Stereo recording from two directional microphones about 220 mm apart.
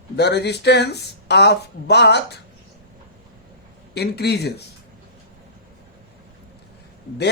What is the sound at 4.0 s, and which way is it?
Speech, 50° left (ahead or behind).